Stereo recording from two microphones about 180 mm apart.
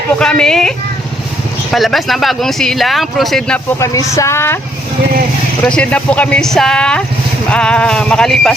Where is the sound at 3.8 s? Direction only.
15° left (ahead or behind).